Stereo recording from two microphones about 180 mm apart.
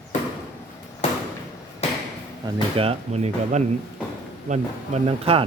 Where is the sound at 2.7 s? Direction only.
30° right (ahead or behind).